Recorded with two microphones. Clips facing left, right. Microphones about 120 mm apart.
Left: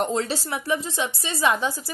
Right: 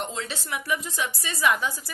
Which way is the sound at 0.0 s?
40° left (ahead or behind).